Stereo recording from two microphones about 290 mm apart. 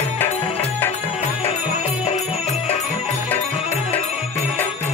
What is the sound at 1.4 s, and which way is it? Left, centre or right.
Music, left.